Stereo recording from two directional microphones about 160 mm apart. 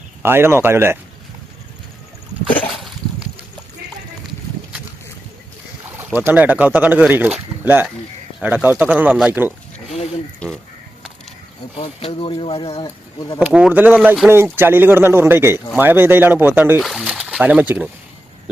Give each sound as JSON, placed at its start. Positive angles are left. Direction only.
{"t": 0.2, "sound": "speech", "side_deg": -15}
{"t": 2.7, "sound": "a sound", "side_deg": 0}
{"t": 6.1, "sound": "speech", "side_deg": -10}
{"t": 10.4, "sound": "speech", "side_deg": 5}
{"t": 11.8, "sound": "speech", "side_deg": 35}
{"t": 13.4, "sound": "speech", "side_deg": -10}